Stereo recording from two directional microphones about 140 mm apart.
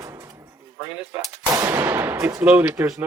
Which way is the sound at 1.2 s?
20° right (ahead or behind).